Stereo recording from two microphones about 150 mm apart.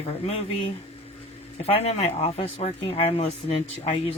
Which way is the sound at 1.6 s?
45° left (ahead or behind).